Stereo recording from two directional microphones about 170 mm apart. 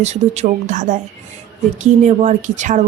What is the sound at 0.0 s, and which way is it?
A woman's voice, 40° right (ahead or behind).